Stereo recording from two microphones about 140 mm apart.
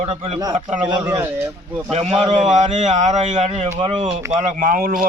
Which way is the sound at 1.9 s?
45° right (ahead or behind).